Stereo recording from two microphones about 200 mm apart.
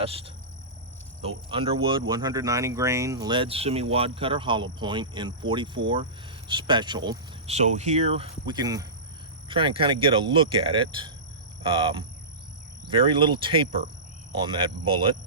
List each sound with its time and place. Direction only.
0.0 s speech: 30° right (ahead or behind)
1.5 s speech: 25° right (ahead or behind)
7.5 s speech: 35° right (ahead or behind)